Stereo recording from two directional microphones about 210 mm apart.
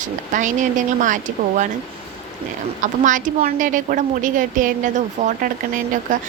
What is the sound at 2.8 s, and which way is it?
Speech, 40° right (ahead or behind).